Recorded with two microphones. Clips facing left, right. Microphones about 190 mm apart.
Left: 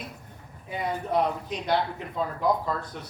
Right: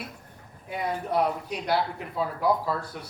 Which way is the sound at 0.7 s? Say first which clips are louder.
Even; 5° right (ahead or behind).